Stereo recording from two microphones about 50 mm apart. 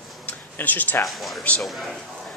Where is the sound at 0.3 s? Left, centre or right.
Left.